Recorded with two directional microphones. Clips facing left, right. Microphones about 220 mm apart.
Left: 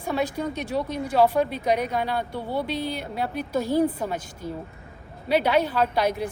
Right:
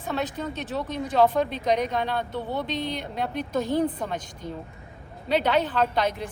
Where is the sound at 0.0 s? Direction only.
10° left (ahead or behind).